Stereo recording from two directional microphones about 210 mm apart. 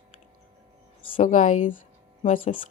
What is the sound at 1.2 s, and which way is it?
Speech, 40° left (ahead or behind).